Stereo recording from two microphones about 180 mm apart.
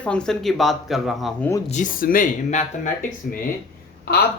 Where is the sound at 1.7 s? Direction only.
45° left (ahead or behind).